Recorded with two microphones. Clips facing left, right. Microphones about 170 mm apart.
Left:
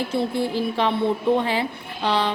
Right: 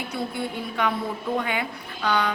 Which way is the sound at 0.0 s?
30° left (ahead or behind).